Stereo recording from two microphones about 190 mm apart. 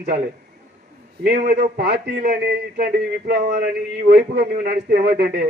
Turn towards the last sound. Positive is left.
turn(degrees=-55)  # may be behind; listen again after turning